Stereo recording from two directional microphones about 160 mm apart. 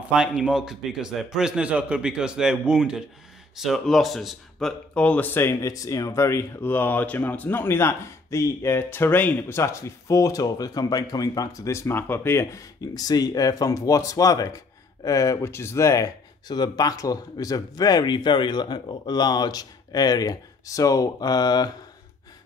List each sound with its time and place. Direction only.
0.1 s a man's voice: 5° right (ahead or behind); by 21.7 s 25° left (ahead or behind)